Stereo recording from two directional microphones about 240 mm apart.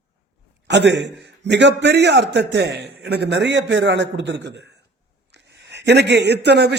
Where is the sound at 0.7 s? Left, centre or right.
Right.